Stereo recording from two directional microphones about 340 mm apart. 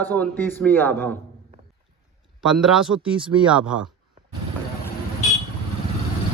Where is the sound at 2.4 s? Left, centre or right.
Centre.